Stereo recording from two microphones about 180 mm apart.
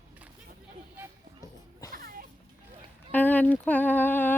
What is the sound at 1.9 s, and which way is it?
Music, 55° right (ahead or behind).